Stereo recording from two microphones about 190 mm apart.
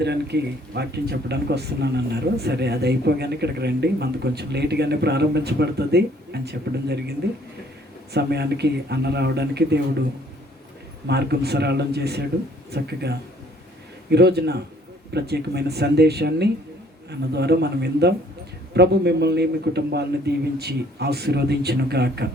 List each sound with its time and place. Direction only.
0.0 s speech: 60° right (ahead or behind)
11.0 s speech: 60° right (ahead or behind)